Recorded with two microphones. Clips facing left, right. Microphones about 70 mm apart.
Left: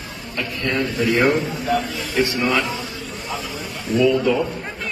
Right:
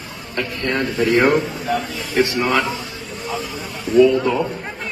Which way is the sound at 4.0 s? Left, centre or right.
Right.